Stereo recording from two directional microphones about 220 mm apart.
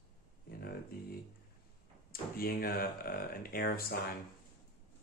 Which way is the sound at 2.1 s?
40° left (ahead or behind).